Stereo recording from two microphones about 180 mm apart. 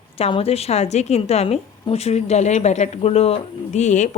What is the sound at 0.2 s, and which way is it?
A woman's voice, 30° left (ahead or behind).